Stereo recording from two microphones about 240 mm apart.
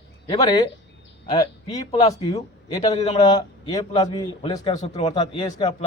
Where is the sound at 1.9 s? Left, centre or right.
Left.